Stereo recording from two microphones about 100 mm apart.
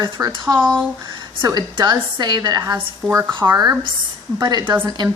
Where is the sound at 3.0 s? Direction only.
5° left (ahead or behind).